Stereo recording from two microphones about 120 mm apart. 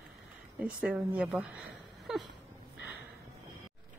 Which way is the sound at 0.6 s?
10° right (ahead or behind).